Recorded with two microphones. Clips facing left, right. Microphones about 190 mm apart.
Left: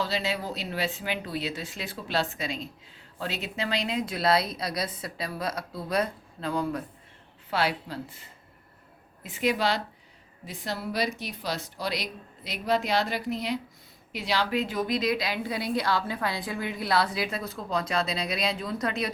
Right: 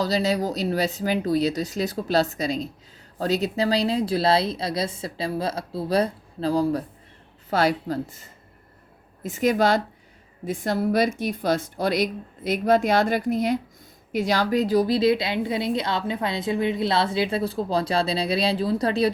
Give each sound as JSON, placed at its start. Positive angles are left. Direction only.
{"t": 0.0, "sound": "a woman's voice", "side_deg": -40}